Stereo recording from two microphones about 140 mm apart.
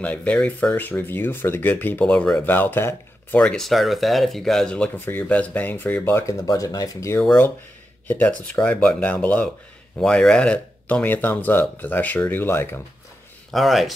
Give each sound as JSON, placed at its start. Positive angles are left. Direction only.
{"t": 0.0, "sound": "speech", "side_deg": 10}
{"t": 13.5, "sound": "speech", "side_deg": 0}